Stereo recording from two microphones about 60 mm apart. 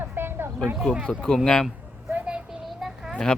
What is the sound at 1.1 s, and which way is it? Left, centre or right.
Speech, centre.